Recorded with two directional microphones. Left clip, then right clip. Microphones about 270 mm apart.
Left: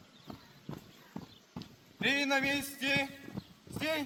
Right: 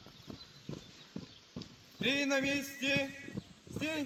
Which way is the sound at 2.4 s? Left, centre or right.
Left.